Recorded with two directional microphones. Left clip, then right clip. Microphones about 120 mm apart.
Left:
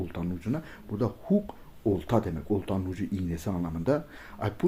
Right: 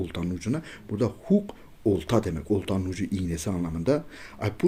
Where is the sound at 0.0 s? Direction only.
20° right (ahead or behind).